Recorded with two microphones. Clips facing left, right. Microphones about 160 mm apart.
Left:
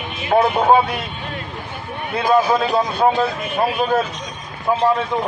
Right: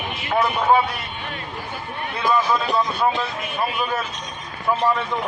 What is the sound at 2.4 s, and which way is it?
A man's voice, 45° left (ahead or behind).